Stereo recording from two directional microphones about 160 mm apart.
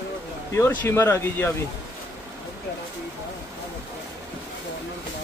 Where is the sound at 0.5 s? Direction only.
15° left (ahead or behind).